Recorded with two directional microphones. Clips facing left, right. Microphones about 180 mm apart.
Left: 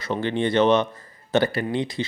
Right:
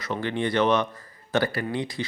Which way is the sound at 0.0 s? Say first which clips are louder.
Left 3 dB; 25° left (ahead or behind).